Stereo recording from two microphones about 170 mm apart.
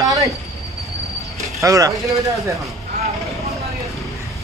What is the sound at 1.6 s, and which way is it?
Speech, 20° right (ahead or behind).